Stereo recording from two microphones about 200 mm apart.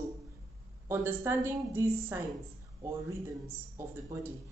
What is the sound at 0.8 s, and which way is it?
A woman's voice, 10° right (ahead or behind).